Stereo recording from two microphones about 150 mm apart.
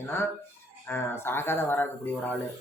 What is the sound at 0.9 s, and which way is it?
Speech, 15° left (ahead or behind).